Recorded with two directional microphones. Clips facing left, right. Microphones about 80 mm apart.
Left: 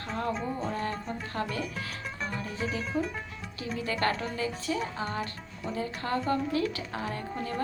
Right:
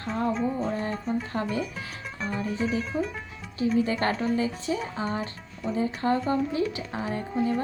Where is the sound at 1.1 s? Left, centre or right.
Centre.